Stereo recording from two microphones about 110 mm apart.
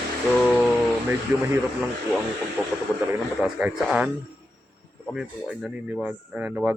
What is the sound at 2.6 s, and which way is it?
Speech, 20° right (ahead or behind).